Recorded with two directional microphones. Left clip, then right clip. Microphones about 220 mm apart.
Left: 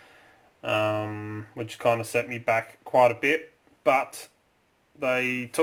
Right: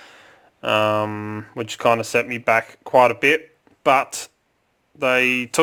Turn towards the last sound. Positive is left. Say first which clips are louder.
# right 8 dB
turn(degrees=-50)  # may be behind; listen again after turning